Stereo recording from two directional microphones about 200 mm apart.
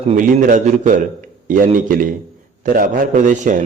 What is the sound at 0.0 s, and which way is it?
A man's voice, 35° right (ahead or behind).